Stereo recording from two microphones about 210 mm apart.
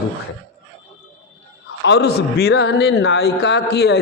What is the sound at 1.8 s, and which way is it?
A man's voice, 55° left (ahead or behind).